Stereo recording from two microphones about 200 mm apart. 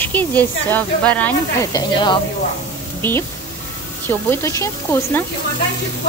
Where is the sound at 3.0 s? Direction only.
10° left (ahead or behind).